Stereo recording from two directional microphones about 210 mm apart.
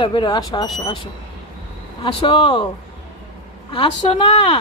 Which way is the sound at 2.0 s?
25° left (ahead or behind).